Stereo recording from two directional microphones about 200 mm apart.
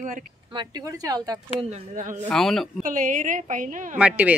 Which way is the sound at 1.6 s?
35° right (ahead or behind).